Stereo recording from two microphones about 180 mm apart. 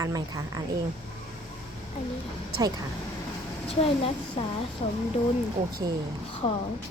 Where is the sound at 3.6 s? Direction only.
35° left (ahead or behind).